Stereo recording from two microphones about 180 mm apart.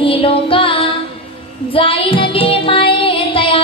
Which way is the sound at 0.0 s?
30° left (ahead or behind).